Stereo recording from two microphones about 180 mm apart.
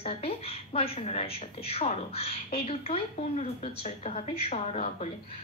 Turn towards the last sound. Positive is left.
turn(degrees=35)  # may be behind; listen again after turning